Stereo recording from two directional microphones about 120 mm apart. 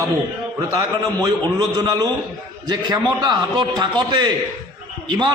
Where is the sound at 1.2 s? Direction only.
35° right (ahead or behind).